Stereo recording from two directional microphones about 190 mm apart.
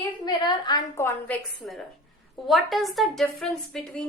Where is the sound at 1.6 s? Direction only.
Centre (ahead or behind).